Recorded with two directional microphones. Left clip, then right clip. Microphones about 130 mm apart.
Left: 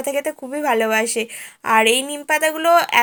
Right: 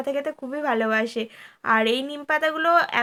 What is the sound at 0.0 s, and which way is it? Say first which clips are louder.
A woman's voice: left 4 dB; 25° left (ahead or behind).